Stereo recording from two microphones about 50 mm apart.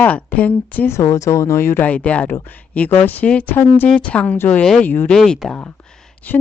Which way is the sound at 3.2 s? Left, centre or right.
Left.